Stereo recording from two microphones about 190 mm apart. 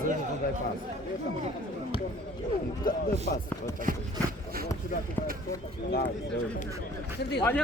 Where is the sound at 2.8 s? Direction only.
50° left (ahead or behind).